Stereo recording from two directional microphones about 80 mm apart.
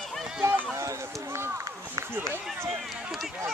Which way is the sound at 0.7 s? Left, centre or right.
Right.